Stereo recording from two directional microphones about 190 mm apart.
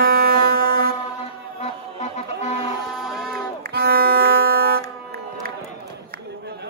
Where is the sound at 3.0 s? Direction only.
Centre (ahead or behind).